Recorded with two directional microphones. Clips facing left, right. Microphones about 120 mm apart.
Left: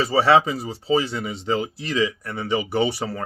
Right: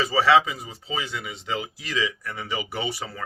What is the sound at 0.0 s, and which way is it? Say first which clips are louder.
Speech: left 2 dB; 30° left (ahead or behind).